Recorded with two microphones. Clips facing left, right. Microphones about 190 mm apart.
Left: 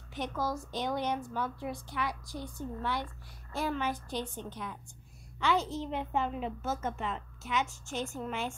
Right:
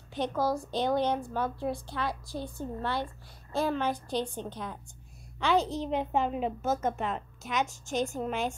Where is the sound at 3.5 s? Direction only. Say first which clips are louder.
Right 4 dB; 15° right (ahead or behind).